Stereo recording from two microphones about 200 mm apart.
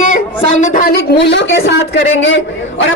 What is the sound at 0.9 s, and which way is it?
Speech, 60° left (ahead or behind).